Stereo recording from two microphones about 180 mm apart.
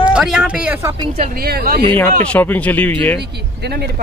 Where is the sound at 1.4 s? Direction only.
55° right (ahead or behind).